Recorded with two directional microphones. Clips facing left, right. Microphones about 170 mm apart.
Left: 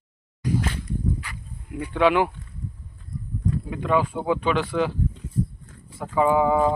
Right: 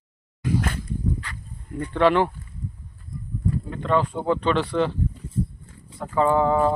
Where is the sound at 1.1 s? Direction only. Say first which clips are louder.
Even; 10° left (ahead or behind).